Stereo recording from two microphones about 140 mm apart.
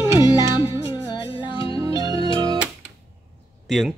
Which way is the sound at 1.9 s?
25° right (ahead or behind).